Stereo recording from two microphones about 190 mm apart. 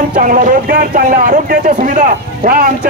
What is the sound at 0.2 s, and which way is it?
A man's voice, 45° right (ahead or behind).